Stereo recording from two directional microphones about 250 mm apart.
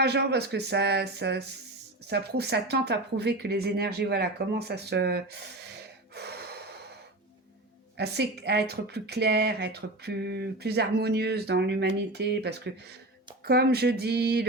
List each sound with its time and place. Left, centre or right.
0.0 s speech: right
7.9 s speech: right